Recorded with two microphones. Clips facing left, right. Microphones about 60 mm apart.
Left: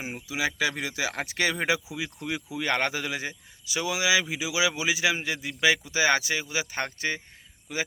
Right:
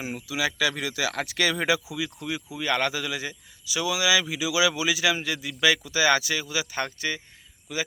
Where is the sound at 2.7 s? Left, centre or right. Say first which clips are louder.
Right 1 dB; left.